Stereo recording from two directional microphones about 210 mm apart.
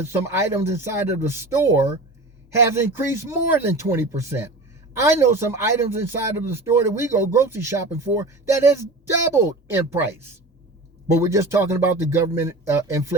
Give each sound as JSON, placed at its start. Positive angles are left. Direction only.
{"t": 0.0, "sound": "speech", "side_deg": -15}